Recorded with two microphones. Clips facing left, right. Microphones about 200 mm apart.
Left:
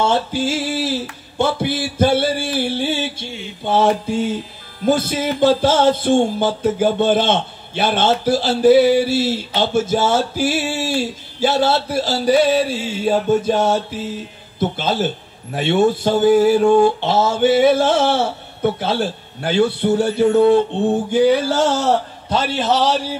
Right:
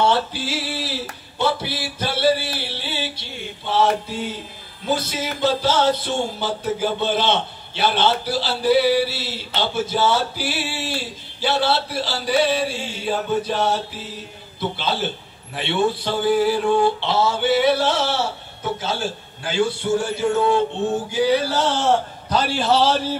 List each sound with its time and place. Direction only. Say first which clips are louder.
0.0 s music: left 2 dB; 45° left (ahead or behind)
1.4 s a sound: left 4 dB; 50° left (ahead or behind)
4.8 s speech: left 7 dB; 55° left (ahead or behind)
22.3 s a man's voice: left 1 dB; 20° left (ahead or behind)